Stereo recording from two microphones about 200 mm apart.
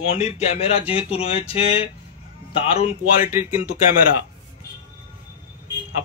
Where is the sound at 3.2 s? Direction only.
10° right (ahead or behind).